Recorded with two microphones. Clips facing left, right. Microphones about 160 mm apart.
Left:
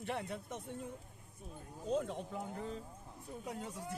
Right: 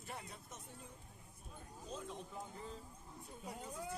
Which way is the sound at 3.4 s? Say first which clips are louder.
Left 2 dB; 80° left.